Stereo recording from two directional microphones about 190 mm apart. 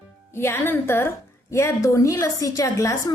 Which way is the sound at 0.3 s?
10° left (ahead or behind).